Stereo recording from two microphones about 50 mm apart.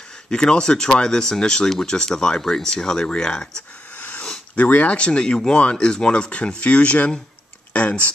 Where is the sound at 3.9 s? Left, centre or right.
Left.